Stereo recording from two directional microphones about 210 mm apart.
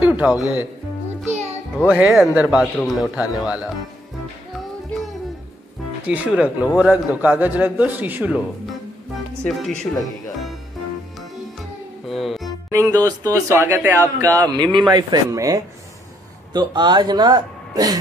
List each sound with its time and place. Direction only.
0.0 s speech: 5° right (ahead or behind)
1.9 s speech: 5° right (ahead or behind)
6.0 s speech: 5° right (ahead or behind)
9.4 s speech: 5° left (ahead or behind)
12.1 s music: centre (ahead or behind)
12.7 s a man's voice: 15° right (ahead or behind)